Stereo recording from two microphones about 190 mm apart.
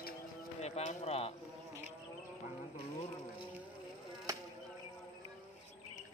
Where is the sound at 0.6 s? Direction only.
35° left (ahead or behind).